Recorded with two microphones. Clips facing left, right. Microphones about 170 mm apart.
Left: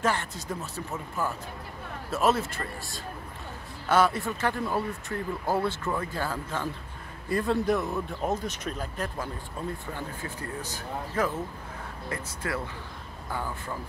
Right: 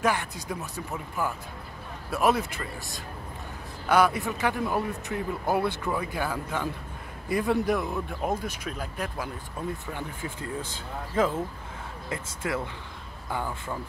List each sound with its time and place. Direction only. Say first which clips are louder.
0.0 s speech: right 1 dB; 15° right (ahead or behind)
12.4 s speech: right 2 dB; 20° right (ahead or behind)